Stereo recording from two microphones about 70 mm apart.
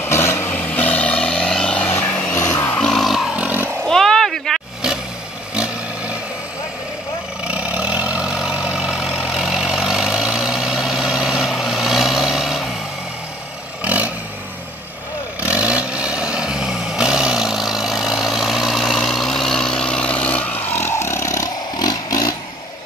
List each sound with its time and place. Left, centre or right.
0.1 s vehicle: left
0.5 s vehicle: left
1.9 s vehicle: left
2.5 s a sound: left
2.8 s music: centre
3.3 s vehicle: right
3.8 s a sound: centre
7.4 s vehicle: centre
13.8 s vehicle: centre
15.4 s vehicle: centre; by 20.7 s left
20.7 s vehicle: left
21.7 s vehicle: left